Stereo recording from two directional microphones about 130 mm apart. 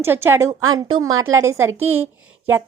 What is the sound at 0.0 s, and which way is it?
Speech, 15° right (ahead or behind).